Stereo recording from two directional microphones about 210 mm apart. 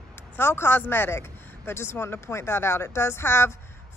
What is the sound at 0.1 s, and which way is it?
Speech, 10° left (ahead or behind).